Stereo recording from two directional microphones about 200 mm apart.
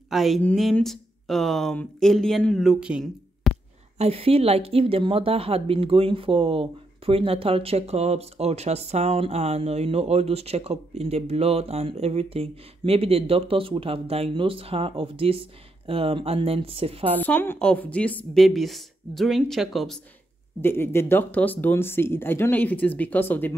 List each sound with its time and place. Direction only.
0.1 s speech: centre (ahead or behind)
4.0 s speech: 30° right (ahead or behind)
17.2 s a woman's voice: 10° left (ahead or behind)
20.6 s speech: 10° left (ahead or behind)